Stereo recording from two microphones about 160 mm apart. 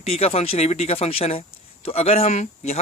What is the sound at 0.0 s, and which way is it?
Speech, 40° left (ahead or behind).